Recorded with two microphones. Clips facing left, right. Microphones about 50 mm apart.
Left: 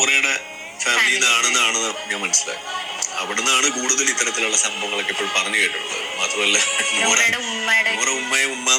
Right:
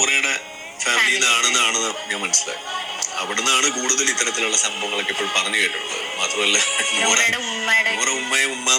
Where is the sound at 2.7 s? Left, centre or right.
Left.